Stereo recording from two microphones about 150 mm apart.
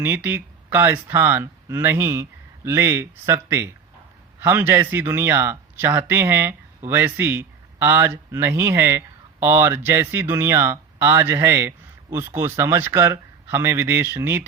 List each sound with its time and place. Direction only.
0.0 s speech: 15° right (ahead or behind)